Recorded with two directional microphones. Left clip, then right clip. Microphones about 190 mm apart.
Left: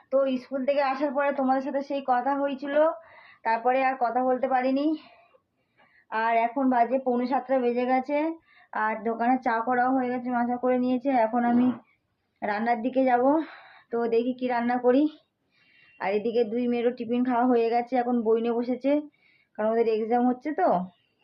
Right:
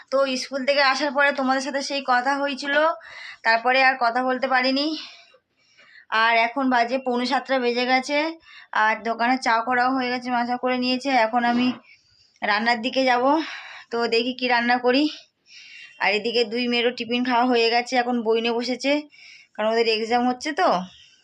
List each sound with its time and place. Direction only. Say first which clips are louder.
0.1 s speech: right 3 dB; centre (ahead or behind)